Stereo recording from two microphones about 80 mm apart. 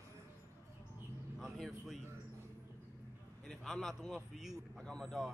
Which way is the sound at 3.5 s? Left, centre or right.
Centre.